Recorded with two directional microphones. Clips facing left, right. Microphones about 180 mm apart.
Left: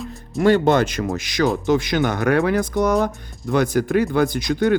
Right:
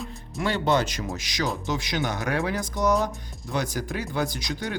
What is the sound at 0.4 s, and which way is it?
Speech, 45° left (ahead or behind).